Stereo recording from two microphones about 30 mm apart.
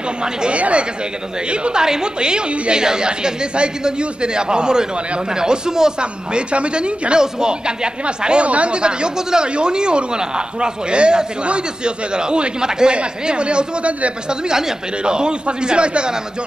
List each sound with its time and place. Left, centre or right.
0.5 s speech: right
1.8 s speech: right
5.9 s speech: right
8.4 s speech: right
8.7 s speech: right
12.9 s speech: right
15.0 s speech: right